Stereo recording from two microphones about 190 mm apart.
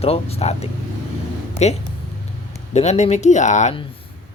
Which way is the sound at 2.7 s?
35° left (ahead or behind).